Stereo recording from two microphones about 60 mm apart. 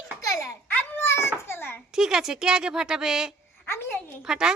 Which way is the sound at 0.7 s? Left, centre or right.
Left.